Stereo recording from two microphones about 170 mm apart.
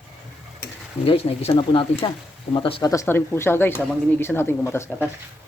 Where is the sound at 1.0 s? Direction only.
35° left (ahead or behind).